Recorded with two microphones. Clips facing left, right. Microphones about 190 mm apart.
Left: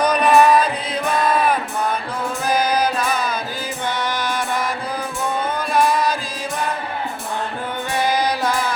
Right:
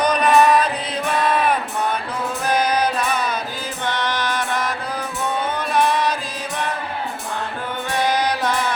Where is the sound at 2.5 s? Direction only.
5° left (ahead or behind).